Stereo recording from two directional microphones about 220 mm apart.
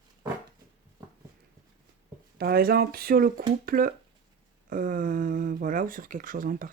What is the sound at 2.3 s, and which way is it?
Speech, 45° right (ahead or behind).